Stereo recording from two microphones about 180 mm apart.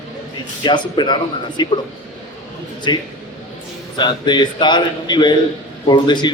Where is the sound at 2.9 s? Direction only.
25° left (ahead or behind).